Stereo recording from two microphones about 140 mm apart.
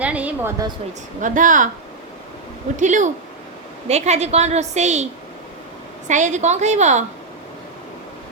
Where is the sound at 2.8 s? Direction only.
65° right (ahead or behind).